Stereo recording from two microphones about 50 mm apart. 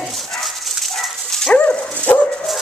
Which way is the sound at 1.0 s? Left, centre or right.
Centre.